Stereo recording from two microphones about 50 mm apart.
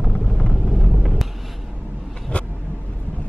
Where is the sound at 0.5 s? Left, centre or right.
Right.